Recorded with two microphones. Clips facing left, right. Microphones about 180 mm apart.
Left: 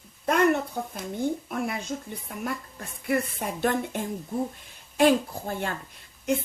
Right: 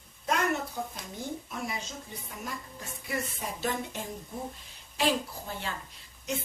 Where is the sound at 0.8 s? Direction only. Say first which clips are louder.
Left 7 dB; 55° left (ahead or behind).